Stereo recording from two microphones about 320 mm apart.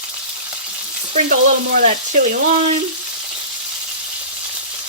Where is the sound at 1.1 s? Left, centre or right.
Right.